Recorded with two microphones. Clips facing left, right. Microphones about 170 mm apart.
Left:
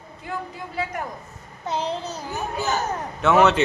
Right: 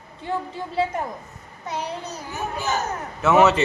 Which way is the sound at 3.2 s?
Centre (ahead or behind).